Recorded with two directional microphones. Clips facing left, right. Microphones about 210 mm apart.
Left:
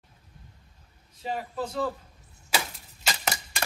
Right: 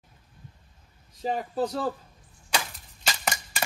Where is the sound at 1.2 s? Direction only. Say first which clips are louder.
Right 4 dB; 40° right (ahead or behind).